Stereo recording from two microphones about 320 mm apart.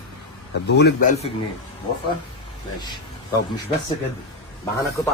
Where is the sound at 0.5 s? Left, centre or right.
Left.